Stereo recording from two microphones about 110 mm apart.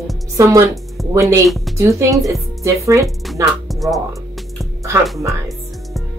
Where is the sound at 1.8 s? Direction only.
30° right (ahead or behind).